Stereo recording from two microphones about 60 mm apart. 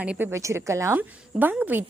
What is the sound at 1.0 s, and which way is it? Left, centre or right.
Speech, right.